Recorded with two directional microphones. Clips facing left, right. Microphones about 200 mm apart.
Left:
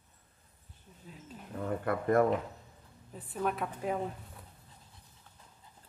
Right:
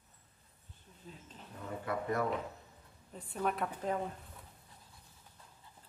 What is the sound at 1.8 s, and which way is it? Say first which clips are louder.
Speech: left 7 dB; 55° left (ahead or behind).